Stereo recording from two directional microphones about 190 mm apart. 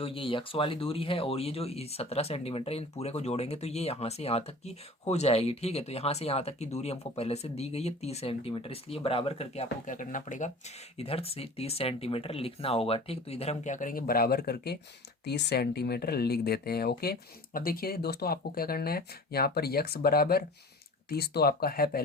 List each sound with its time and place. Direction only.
0.0 s speech: 30° left (ahead or behind)
10.9 s speech: 30° left (ahead or behind); by 22.0 s 50° left (ahead or behind)